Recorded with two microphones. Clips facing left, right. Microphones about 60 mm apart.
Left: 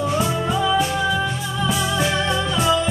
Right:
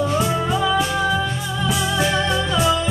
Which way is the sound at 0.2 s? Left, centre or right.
Centre.